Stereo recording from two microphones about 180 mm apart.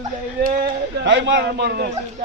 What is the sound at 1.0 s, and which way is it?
Speech, 75° right (ahead or behind).